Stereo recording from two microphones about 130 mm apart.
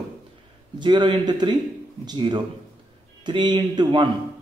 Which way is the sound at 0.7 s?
35° right (ahead or behind).